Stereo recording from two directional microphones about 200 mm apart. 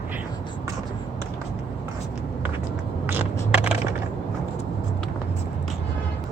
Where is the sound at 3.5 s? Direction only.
5° right (ahead or behind).